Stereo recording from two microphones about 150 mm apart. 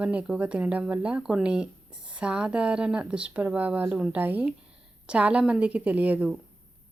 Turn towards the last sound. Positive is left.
turn(degrees=-10)  # may be behind; listen again after turning